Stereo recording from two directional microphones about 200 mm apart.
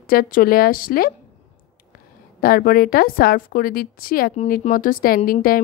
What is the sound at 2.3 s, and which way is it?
Speech, 45° left (ahead or behind).